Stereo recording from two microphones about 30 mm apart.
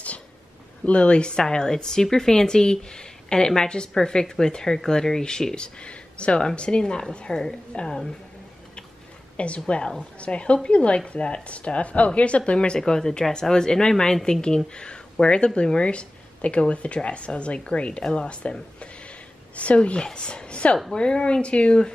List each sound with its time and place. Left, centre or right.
0.8 s a woman's voice: left
1.3 s a woman's voice: left
7.2 s a woman's voice: left
9.4 s a woman's voice: left
12.5 s a woman's voice: left
18.8 s a sound: left
20.2 s a woman's voice: left